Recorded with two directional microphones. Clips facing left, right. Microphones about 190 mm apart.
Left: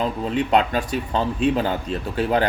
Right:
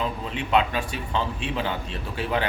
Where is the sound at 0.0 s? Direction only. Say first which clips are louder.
Left 7 dB; 40° left (ahead or behind).